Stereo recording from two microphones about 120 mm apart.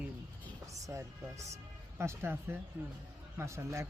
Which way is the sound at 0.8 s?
25° right (ahead or behind).